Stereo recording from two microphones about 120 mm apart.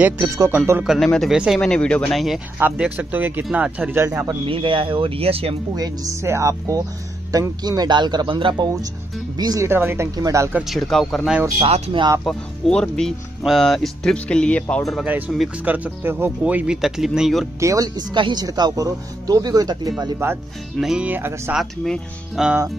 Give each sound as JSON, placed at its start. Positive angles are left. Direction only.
{"t": 0.0, "sound": "speech", "side_deg": -25}
{"t": 0.8, "sound": "speech", "side_deg": 5}
{"t": 2.6, "sound": "speech", "side_deg": -15}
{"t": 4.5, "sound": "speech", "side_deg": -45}
{"t": 5.8, "sound": "speech", "side_deg": -25}
{"t": 9.4, "sound": "speech", "side_deg": -30}
{"t": 9.7, "sound": "speech", "side_deg": -20}
{"t": 10.7, "sound": "speech", "side_deg": 0}
{"t": 11.6, "sound": "speech", "side_deg": -50}
{"t": 12.3, "sound": "speech", "side_deg": 5}
{"t": 15.0, "sound": "speech", "side_deg": -15}
{"t": 17.6, "sound": "speech", "side_deg": -30}
{"t": 20.8, "sound": "speech", "side_deg": -10}
{"t": 21.5, "sound": "speech", "side_deg": 0}